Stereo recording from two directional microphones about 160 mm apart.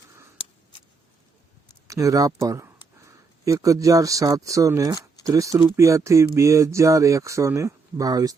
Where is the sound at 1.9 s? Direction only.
20° right (ahead or behind).